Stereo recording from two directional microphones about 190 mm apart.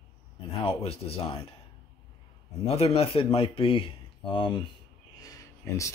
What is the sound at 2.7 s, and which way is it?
Speech, 30° left (ahead or behind).